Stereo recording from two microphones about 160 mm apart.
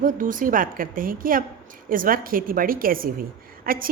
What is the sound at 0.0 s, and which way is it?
A woman's voice, 55° right (ahead or behind).